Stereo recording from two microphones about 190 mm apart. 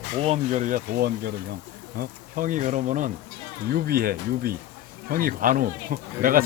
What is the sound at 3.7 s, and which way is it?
Speech, 55° right (ahead or behind).